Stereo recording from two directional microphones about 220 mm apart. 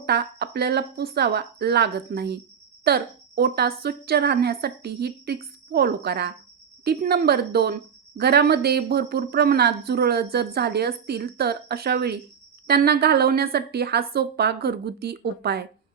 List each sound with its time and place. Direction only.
0.0 s a woman's voice: 45° right (ahead or behind)